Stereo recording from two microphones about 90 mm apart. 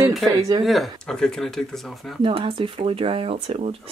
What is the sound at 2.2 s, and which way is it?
Speech, 75° right (ahead or behind).